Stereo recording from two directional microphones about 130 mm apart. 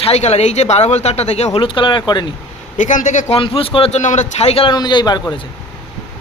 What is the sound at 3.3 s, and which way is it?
Speech, 45° left (ahead or behind).